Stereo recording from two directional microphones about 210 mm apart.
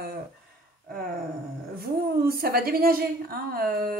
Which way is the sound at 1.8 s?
45° right (ahead or behind).